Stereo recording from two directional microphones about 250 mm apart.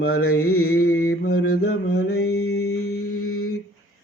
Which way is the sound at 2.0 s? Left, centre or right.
Left.